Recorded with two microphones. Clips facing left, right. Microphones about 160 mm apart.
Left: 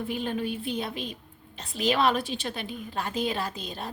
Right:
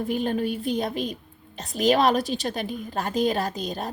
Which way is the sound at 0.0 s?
40° right (ahead or behind).